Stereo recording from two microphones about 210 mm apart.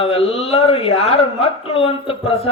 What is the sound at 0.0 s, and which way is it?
Speech, 25° left (ahead or behind).